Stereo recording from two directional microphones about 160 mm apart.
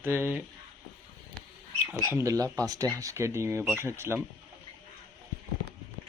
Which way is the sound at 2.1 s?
20° right (ahead or behind).